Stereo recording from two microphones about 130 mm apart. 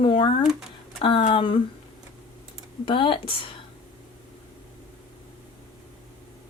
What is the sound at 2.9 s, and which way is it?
Speech, 40° left (ahead or behind).